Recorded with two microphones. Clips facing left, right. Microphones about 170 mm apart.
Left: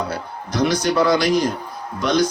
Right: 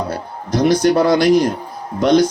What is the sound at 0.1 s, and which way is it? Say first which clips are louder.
A man's voice: right 5 dB; 55° right (ahead or behind).